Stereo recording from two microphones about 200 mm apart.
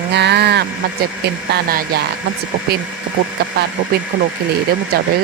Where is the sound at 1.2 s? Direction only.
55° right (ahead or behind).